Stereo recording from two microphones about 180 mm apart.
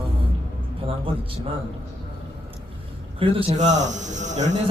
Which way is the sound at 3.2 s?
35° right (ahead or behind).